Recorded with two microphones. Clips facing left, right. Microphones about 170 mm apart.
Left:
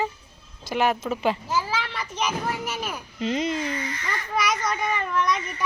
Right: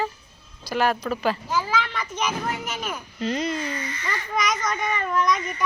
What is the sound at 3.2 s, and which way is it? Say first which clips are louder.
Speech: left 1 dB; 20° left (ahead or behind).